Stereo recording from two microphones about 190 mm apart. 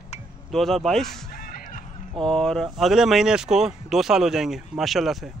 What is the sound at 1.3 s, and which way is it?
Music, 50° left (ahead or behind).